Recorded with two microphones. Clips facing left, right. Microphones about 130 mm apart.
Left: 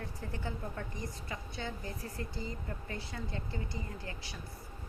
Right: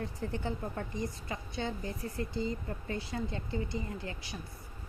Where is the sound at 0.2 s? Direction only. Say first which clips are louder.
Right 4 dB; 30° right (ahead or behind).